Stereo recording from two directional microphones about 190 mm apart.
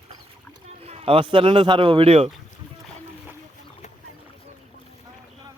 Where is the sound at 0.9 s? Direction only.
30° right (ahead or behind).